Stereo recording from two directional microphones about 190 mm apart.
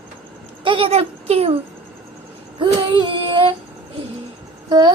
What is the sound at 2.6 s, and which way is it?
Speech, 25° right (ahead or behind).